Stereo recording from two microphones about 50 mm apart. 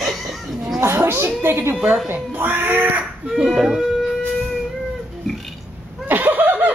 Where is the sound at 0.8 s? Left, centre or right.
Right.